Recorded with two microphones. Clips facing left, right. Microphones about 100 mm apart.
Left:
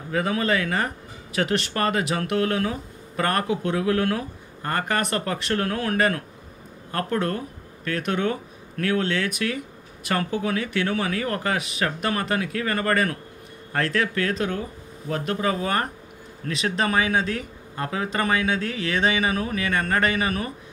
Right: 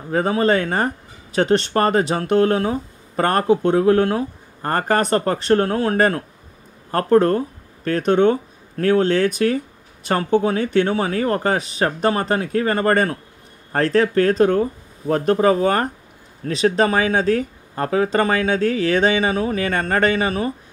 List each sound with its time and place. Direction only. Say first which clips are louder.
0.1 s speech: right 6 dB; 35° right (ahead or behind)